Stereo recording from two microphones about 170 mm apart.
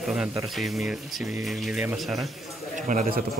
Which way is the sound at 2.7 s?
45° right (ahead or behind).